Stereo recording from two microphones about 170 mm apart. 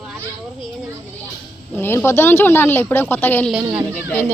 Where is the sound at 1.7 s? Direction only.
15° left (ahead or behind).